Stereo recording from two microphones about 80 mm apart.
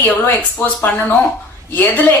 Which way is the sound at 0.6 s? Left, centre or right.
Left.